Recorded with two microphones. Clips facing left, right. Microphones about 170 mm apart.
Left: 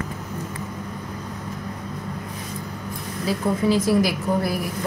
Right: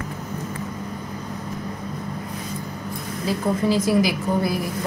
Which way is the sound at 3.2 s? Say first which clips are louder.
Even; centre (ahead or behind).